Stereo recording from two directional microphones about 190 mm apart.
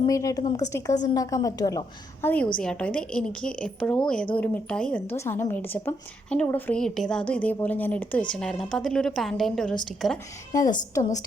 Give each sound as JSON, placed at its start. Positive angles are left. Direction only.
{"t": 0.0, "sound": "a woman's voice", "side_deg": 15}
{"t": 2.2, "sound": "a woman's voice", "side_deg": 10}
{"t": 10.9, "sound": "a woman's voice", "side_deg": 15}